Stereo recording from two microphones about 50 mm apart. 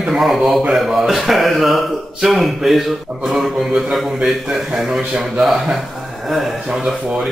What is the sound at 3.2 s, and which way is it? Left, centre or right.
Mantra, centre.